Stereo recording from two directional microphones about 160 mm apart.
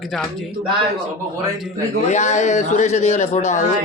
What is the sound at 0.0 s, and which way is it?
Speech, centre (ahead or behind).